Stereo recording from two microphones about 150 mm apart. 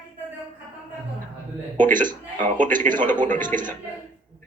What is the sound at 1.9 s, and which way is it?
A man's voice, 65° right (ahead or behind).